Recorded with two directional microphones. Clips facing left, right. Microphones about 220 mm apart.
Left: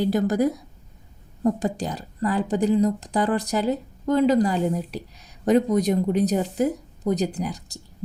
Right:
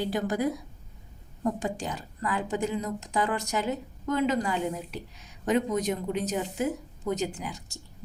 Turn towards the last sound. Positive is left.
turn(degrees=35)  # may be behind; listen again after turning